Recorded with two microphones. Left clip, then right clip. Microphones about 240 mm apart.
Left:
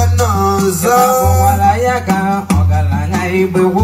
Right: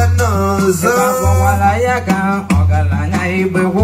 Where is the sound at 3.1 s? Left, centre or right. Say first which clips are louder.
Left 2 dB; centre.